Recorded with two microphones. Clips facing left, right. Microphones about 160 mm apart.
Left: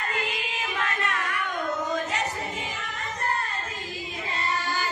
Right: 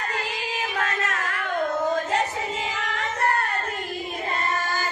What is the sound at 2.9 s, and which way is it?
Music, 75° right (ahead or behind).